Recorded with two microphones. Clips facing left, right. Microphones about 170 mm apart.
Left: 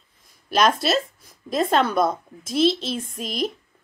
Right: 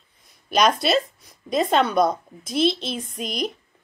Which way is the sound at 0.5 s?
Centre (ahead or behind).